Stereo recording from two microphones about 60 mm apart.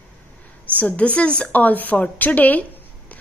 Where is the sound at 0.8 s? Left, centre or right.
Left.